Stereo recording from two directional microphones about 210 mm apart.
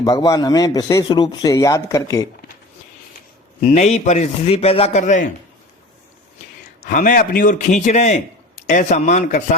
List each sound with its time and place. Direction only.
0.0 s speech: 15° left (ahead or behind)
3.6 s a man's voice: 30° left (ahead or behind)
6.8 s a man's voice: 40° left (ahead or behind)